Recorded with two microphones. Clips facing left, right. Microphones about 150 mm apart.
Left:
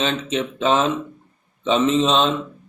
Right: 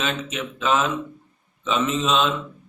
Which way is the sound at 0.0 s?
30° left (ahead or behind).